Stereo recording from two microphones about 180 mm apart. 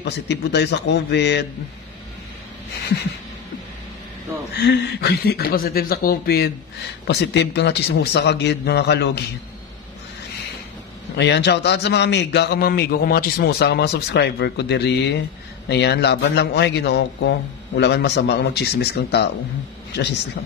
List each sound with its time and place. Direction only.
0.0 s a man's voice: 70° left (ahead or behind)
4.6 s a man's voice: 70° left (ahead or behind)
11.1 s a man's voice: 70° left (ahead or behind)